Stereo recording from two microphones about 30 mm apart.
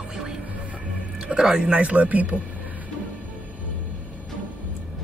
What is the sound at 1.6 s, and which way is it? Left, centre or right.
Speech, right.